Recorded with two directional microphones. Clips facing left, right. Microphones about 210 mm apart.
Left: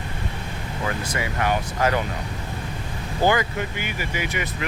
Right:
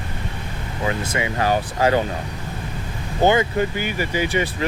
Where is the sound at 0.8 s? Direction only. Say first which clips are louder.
Right 4 dB; 25° right (ahead or behind).